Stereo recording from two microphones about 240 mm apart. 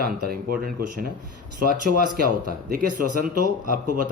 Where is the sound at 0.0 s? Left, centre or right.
Right.